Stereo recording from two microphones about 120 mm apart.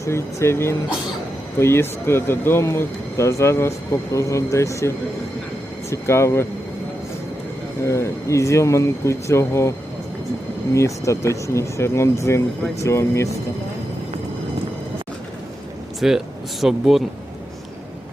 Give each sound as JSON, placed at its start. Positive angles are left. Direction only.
{"t": 0.0, "sound": "speech", "side_deg": 25}
{"t": 7.9, "sound": "speech", "side_deg": 25}
{"t": 10.8, "sound": "speech", "side_deg": 25}
{"t": 16.0, "sound": "speech", "side_deg": -5}